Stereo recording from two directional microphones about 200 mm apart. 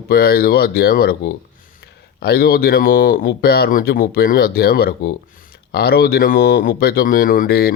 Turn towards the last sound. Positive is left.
turn(degrees=50)  # may be behind; listen again after turning